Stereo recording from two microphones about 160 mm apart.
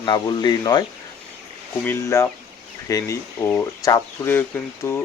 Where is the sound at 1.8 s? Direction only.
15° left (ahead or behind).